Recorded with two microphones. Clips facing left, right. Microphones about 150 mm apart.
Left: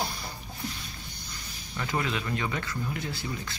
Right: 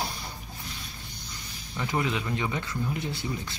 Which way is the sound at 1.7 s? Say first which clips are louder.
Right 2 dB; 15° right (ahead or behind).